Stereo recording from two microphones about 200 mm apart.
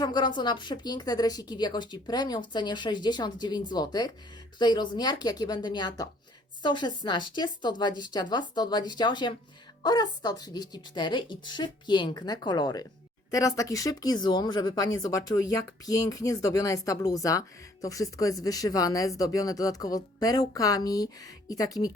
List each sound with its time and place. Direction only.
0.0 s speech: 20° left (ahead or behind)